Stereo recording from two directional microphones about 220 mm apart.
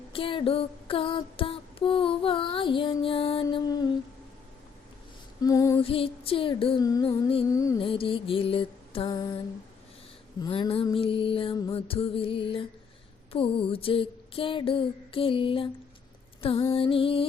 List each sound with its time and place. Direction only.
0.1 s music: 25° left (ahead or behind)
5.4 s female singing: 15° left (ahead or behind)
5.8 s music: 25° left (ahead or behind)
10.4 s music: 25° left (ahead or behind)
16.7 s music: 25° left (ahead or behind)